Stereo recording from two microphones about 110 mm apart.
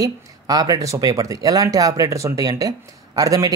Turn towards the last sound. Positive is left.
turn(degrees=-30)  # may be behind; listen again after turning